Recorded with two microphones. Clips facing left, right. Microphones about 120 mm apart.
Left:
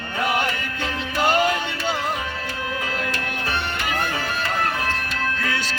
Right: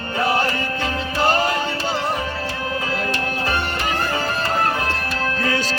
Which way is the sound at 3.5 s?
35° right (ahead or behind).